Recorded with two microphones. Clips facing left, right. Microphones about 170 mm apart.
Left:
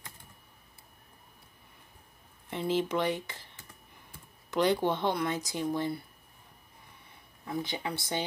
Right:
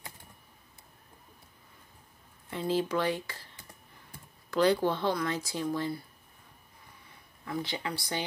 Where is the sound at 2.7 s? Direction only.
20° left (ahead or behind).